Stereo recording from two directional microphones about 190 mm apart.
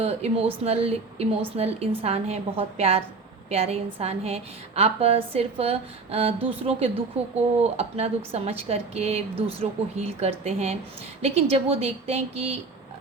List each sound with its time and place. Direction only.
0.0 s a woman's voice: 35° right (ahead or behind)